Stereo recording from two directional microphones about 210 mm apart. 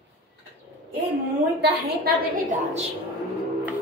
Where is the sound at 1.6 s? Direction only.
50° right (ahead or behind).